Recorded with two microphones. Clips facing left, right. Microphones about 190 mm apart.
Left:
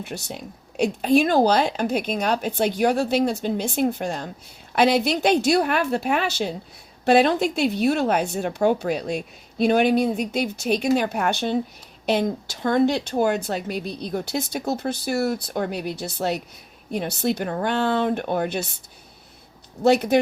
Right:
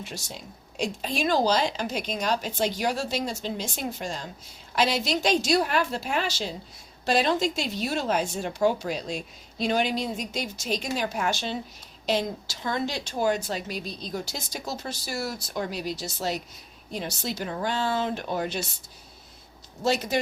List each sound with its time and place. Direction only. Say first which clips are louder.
0.0 s speech: left 6 dB; 60° left (ahead or behind)
19.8 s speech: left 8 dB; 60° left (ahead or behind)